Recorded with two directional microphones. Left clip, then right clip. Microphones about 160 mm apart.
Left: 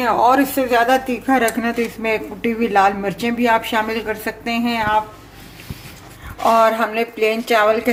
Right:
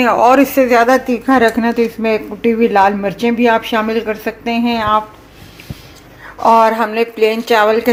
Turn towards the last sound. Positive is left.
turn(degrees=-40)  # may be behind; listen again after turning